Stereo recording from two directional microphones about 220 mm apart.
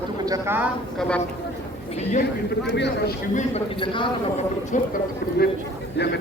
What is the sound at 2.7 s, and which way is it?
Speech, 50° left (ahead or behind).